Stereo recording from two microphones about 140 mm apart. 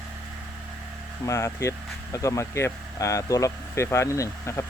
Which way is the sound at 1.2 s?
20° left (ahead or behind).